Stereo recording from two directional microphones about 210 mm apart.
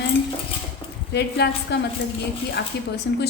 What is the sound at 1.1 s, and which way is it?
Speech, 50° left (ahead or behind).